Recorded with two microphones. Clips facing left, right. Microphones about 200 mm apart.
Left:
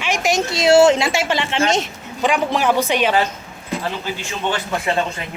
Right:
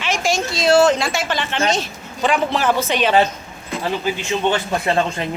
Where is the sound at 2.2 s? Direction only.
15° left (ahead or behind).